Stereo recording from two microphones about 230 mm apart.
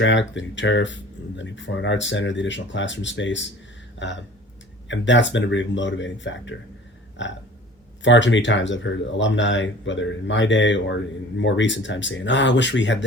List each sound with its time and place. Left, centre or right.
0.0 s speech: left